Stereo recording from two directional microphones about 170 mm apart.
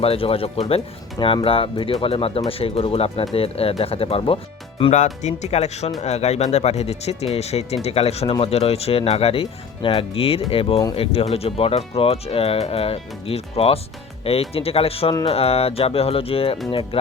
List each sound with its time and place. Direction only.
0.0 s speech: 35° left (ahead or behind)